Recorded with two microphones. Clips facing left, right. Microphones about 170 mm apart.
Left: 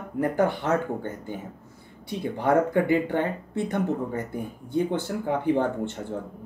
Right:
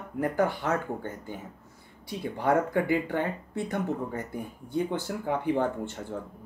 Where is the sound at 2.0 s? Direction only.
25° left (ahead or behind).